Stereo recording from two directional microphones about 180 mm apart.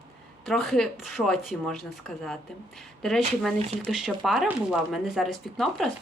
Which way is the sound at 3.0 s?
Centre (ahead or behind).